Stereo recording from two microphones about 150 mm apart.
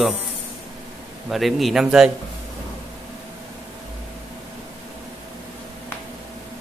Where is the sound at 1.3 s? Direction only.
Centre (ahead or behind).